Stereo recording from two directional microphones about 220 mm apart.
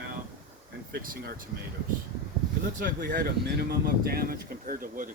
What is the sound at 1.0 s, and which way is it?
Speech, 40° right (ahead or behind).